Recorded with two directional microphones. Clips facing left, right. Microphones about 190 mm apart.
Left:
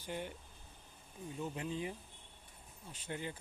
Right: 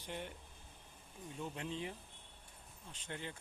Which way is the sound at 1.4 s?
5° left (ahead or behind).